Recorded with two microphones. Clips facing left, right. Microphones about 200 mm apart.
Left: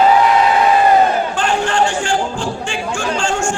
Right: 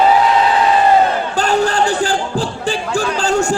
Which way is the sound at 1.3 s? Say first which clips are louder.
Right 2 dB; 40° right (ahead or behind).